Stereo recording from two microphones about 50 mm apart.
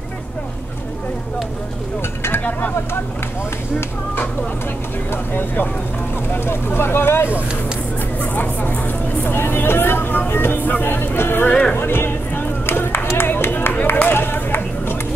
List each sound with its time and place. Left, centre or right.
5.1 s speech: left
8.6 s speech: left
11.7 s a sound: left
14.0 s run: left